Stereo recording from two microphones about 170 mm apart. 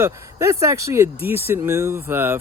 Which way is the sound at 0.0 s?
15° right (ahead or behind).